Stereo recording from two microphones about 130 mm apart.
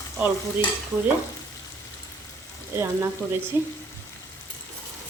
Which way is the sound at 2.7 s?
20° right (ahead or behind).